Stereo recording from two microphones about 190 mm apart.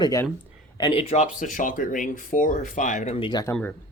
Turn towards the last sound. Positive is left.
turn(degrees=20)  # may be behind; listen again after turning